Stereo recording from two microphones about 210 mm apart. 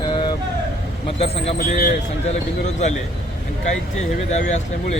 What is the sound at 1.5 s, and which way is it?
Speech, 45° left (ahead or behind).